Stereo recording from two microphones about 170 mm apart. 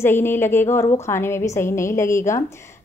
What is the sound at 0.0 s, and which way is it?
A woman's voice, 15° left (ahead or behind).